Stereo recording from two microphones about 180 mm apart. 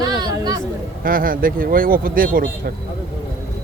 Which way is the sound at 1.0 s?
50° right (ahead or behind).